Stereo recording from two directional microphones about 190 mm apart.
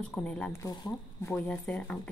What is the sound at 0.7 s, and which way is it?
Speech, 20° left (ahead or behind).